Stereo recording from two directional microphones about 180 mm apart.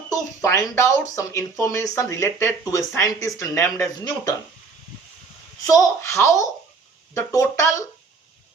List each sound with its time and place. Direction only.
0.1 s speech: 15° left (ahead or behind)
5.6 s a child's voice: 20° left (ahead or behind)